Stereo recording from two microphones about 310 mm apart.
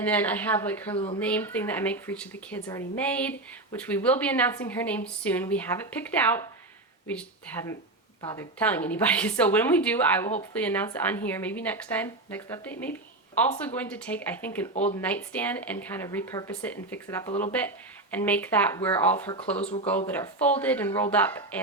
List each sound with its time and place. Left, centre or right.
0.0 s speech: centre
0.9 s speech: centre
1.2 s speech: centre